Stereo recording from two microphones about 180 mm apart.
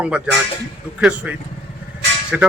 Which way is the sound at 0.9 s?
5° right (ahead or behind).